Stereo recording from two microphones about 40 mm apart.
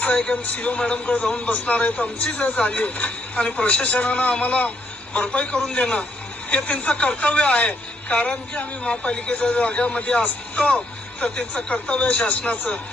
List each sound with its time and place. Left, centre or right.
0.0 s speech: left